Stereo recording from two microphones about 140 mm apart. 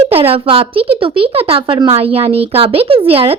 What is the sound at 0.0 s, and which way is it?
A woman's voice, 45° right (ahead or behind).